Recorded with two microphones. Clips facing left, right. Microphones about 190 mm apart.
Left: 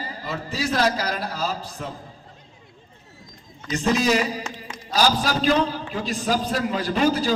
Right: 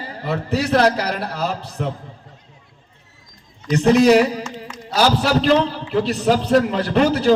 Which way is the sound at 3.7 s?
65° right (ahead or behind).